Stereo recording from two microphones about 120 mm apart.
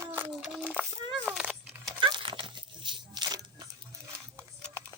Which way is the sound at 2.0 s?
45° right (ahead or behind).